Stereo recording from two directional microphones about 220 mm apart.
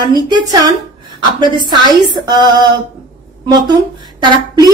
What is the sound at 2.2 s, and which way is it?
Speech, 20° right (ahead or behind).